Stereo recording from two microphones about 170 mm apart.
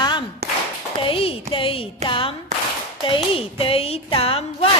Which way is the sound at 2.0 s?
30° left (ahead or behind).